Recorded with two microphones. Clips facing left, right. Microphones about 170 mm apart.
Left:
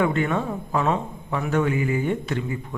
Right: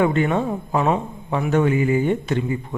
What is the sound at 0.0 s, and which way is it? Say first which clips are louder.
A man's voice: right 3 dB; 25° right (ahead or behind).